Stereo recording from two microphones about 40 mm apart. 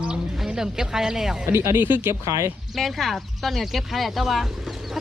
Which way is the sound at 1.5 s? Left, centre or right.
Right.